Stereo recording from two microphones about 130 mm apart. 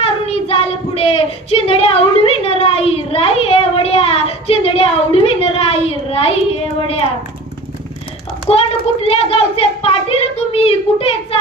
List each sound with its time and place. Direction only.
0.0 s child singing: 45° left (ahead or behind)
8.5 s child singing: 50° left (ahead or behind)